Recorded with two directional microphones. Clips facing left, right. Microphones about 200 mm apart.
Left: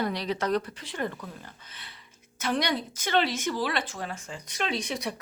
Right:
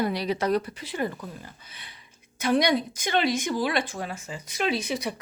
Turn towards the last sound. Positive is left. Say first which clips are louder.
# right 4 dB
turn(degrees=-5)  # may be behind; listen again after turning